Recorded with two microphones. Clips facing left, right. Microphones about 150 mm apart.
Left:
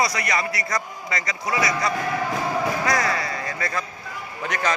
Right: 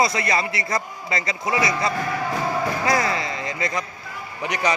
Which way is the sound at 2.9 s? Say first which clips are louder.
Right 1 dB; 25° right (ahead or behind).